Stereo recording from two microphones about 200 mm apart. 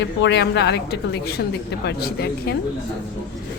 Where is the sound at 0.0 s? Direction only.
60° left (ahead or behind).